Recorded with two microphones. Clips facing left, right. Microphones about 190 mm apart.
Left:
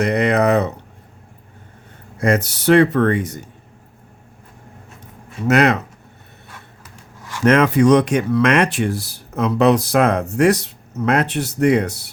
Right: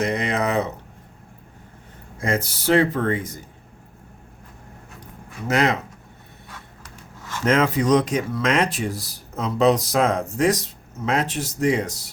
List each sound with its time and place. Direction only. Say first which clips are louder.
0.0 s speech: left 6 dB; 65° left (ahead or behind)
2.1 s speech: left 6 dB; 70° left (ahead or behind)
5.5 s speech: left 6 dB; 70° left (ahead or behind)
6.8 s a sound: even; 10° left (ahead or behind)
7.4 s speech: left 6 dB; 70° left (ahead or behind)